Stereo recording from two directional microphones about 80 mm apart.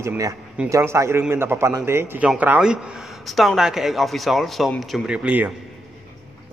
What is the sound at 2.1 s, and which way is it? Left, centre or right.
Speech, centre.